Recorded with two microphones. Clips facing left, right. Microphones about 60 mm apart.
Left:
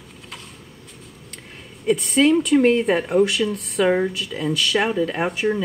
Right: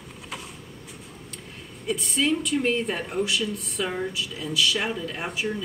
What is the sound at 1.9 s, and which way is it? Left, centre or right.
Speech, left.